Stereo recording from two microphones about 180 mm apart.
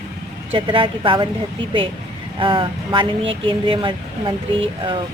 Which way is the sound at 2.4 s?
30° right (ahead or behind).